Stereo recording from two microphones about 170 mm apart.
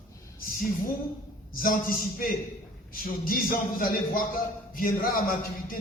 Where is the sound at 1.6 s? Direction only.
60° left (ahead or behind).